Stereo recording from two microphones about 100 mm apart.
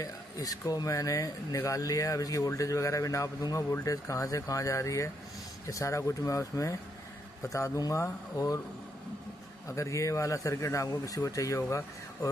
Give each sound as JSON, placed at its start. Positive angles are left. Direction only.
{"t": 0.0, "sound": "speech", "side_deg": 35}
{"t": 9.7, "sound": "speech", "side_deg": 30}